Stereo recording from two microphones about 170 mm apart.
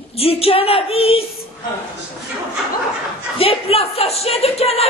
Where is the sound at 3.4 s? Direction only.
35° left (ahead or behind).